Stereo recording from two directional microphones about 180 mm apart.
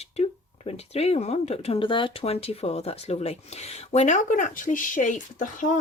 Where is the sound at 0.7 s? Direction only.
35° left (ahead or behind).